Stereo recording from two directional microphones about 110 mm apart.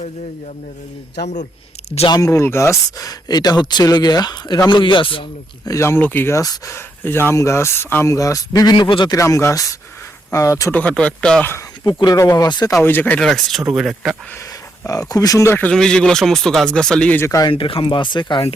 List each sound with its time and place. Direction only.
2.0 s speech: 35° left (ahead or behind)
4.8 s speech: 50° left (ahead or behind)
5.6 s speech: 25° left (ahead or behind)
8.7 s speech: 50° left (ahead or behind)
9.1 s speech: 30° left (ahead or behind)
10.7 s speech: 15° left (ahead or behind)
11.9 s speech: 40° left (ahead or behind)
12.8 s speech: 20° left (ahead or behind)
13.1 s speech: 5° left (ahead or behind)
14.8 s speech: 35° left (ahead or behind)
15.4 s speech: 20° left (ahead or behind)
15.7 s speech: 5° left (ahead or behind)
17.2 s speech: 30° left (ahead or behind)
17.5 s speech: 55° left (ahead or behind)